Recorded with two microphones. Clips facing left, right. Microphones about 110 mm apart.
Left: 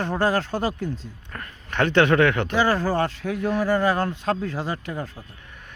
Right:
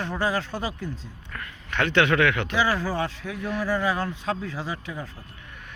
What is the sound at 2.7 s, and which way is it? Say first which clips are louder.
Speech: left 4 dB; 30° left (ahead or behind).